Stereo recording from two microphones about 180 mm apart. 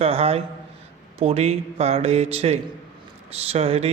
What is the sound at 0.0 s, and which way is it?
Mantra, 35° right (ahead or behind).